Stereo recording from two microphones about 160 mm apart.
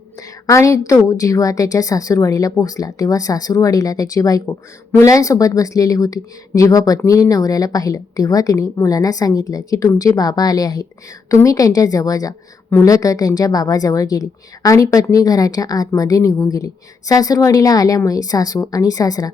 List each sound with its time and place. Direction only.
0.4 s speech: 20° left (ahead or behind)